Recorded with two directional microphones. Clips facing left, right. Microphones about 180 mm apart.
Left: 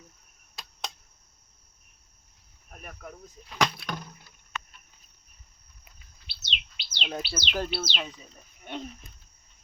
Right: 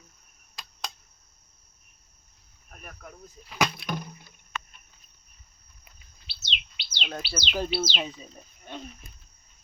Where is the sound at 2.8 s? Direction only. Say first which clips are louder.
Left 2 dB; centre (ahead or behind).